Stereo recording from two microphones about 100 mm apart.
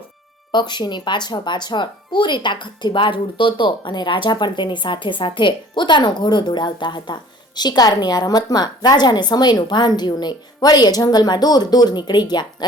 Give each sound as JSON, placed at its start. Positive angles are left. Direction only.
{"t": 0.5, "sound": "speech", "side_deg": 50}